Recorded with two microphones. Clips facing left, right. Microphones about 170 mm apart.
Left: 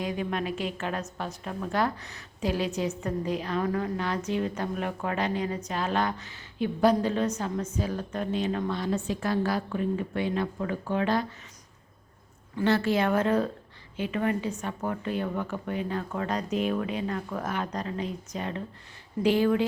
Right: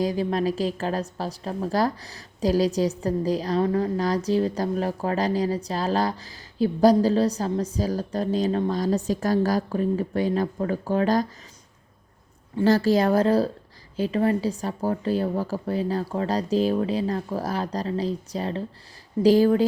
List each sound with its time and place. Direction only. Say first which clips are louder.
0.0 s a woman's voice: right 7 dB; 35° right (ahead or behind)
12.5 s a woman's voice: right 5 dB; 35° right (ahead or behind)